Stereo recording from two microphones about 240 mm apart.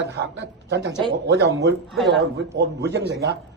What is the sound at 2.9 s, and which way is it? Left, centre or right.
Speech, right.